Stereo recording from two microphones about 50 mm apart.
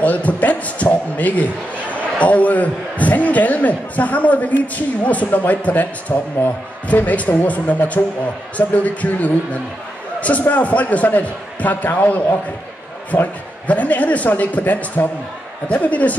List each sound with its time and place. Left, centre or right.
0.0 s a man's voice: left